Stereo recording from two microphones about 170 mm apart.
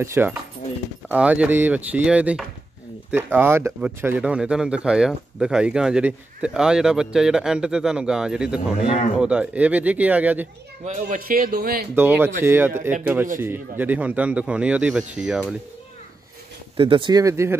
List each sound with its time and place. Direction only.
0.0 s speech: 15° right (ahead or behind)
8.8 s speech: 35° left (ahead or behind)
9.2 s speech: 5° right (ahead or behind)
10.9 s speech: 50° right (ahead or behind)
11.9 s speech: 10° right (ahead or behind)
16.7 s speech: 30° right (ahead or behind)